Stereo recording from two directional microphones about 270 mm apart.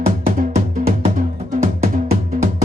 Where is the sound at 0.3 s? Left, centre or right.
Right.